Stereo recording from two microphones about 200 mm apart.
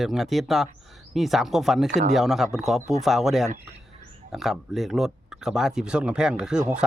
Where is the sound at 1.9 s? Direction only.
35° right (ahead or behind).